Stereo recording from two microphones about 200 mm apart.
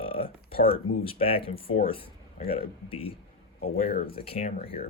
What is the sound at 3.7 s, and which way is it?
Speech, 50° left (ahead or behind).